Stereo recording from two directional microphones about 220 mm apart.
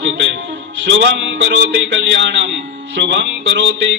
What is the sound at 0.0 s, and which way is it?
Music, 55° right (ahead or behind).